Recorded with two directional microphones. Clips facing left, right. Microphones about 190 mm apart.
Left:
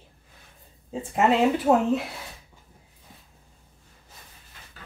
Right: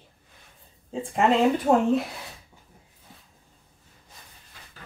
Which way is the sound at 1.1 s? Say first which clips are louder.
Even; 5° left (ahead or behind).